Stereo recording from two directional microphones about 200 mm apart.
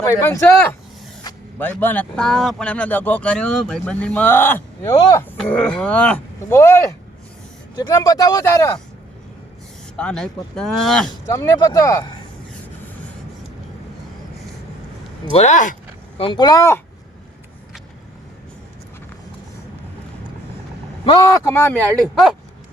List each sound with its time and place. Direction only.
0.0 s speech: 15° left (ahead or behind)
5.4 s speech: 5° left (ahead or behind)
10.0 s speech: 5° left (ahead or behind)
11.1 s speech: 15° left (ahead or behind)
15.2 s speech: 30° left (ahead or behind)
16.1 s speech: 25° left (ahead or behind)
21.0 s speech: 25° left (ahead or behind)
21.4 s speech: 10° left (ahead or behind)
22.1 s speech: centre (ahead or behind)